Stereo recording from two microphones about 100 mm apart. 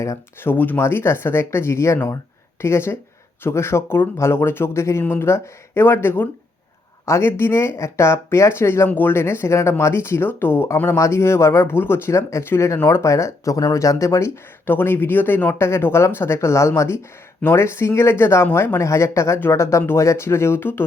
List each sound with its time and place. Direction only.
0.0 s speech: 30° left (ahead or behind)
0.5 s speech: 20° left (ahead or behind)